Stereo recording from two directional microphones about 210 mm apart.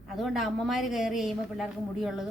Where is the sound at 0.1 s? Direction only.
Centre (ahead or behind).